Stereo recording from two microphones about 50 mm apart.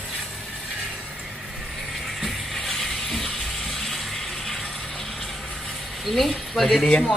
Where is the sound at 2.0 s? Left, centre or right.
Centre.